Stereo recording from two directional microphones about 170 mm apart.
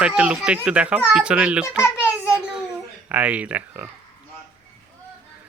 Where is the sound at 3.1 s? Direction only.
10° right (ahead or behind).